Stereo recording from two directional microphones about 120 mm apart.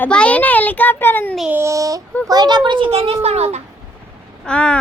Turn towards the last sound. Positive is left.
turn(degrees=10)  # may be behind; listen again after turning